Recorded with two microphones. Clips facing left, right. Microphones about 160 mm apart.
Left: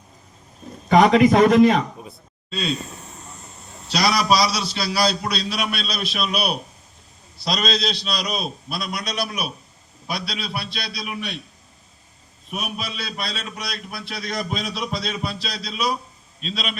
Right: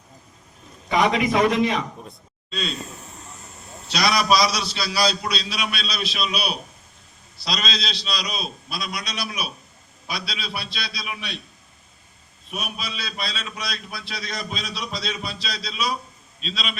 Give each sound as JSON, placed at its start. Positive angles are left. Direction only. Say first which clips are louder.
{"t": 0.9, "sound": "a man's voice", "louder": "left 7 dB", "side_deg": 45}
{"t": 2.0, "sound": "a sound", "louder": "left 1 dB", "side_deg": 5}
{"t": 3.9, "sound": "a man's voice", "louder": "left 1 dB", "side_deg": 35}
{"t": 4.7, "sound": "a man's voice", "louder": "left 2 dB", "side_deg": 55}
{"t": 12.5, "sound": "a man's voice", "louder": "left 2 dB", "side_deg": 50}